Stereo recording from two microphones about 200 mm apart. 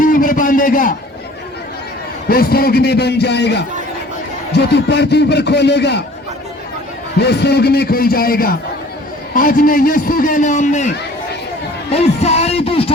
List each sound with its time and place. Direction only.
0.0 s a sound: 40° left (ahead or behind)
2.3 s a man's voice: 50° left (ahead or behind)
7.2 s a man's voice: 55° left (ahead or behind); by 10.9 s 35° left (ahead or behind)
11.9 s music: 30° left (ahead or behind)